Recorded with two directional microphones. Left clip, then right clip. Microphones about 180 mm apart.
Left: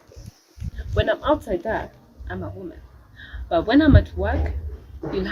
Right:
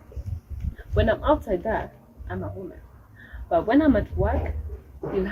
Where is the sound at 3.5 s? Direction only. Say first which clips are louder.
Left 2 dB; centre (ahead or behind).